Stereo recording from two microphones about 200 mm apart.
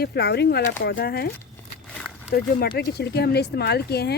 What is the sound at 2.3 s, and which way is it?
Speech, 50° left (ahead or behind).